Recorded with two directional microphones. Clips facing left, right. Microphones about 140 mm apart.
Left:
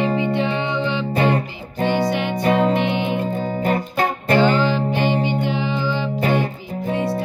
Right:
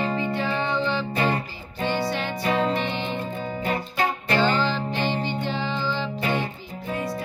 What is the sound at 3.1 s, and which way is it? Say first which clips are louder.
Music: left 7 dB; 50° left (ahead or behind).